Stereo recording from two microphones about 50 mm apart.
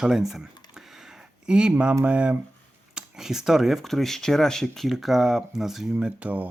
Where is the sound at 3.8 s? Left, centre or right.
Centre.